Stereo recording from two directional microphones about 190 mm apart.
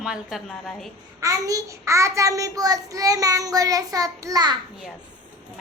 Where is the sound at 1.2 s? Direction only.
15° right (ahead or behind).